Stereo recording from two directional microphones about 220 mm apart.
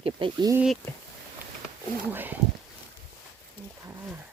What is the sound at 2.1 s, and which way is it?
Speech, 10° right (ahead or behind).